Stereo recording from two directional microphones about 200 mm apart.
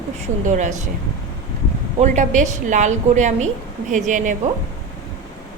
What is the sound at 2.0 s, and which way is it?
A woman's voice, 35° right (ahead or behind).